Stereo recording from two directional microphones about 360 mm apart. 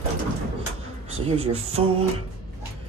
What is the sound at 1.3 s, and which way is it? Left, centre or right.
Speech, centre.